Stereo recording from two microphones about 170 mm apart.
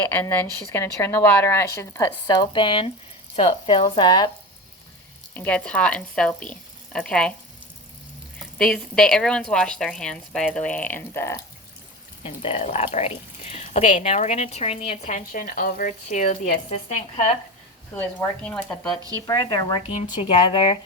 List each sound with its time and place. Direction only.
0.0 s a woman's voice: 15° left (ahead or behind)
5.3 s a woman's voice: 10° left (ahead or behind)
8.5 s speech: 5° left (ahead or behind)
12.2 s speech: 35° left (ahead or behind)
17.9 s a woman's voice: 10° left (ahead or behind)
19.1 s speech: 25° left (ahead or behind)
19.7 s speech: 35° left (ahead or behind)